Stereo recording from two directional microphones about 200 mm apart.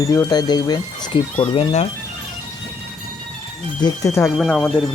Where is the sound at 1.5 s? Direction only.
30° left (ahead or behind).